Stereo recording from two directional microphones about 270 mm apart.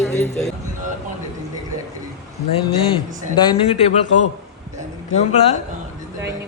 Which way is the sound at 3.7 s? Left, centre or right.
Left.